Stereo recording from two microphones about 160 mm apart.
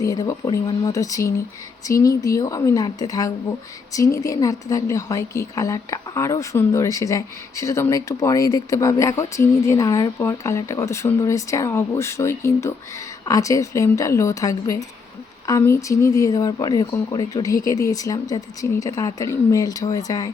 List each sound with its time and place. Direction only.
0.0 s a woman's voice: 20° left (ahead or behind)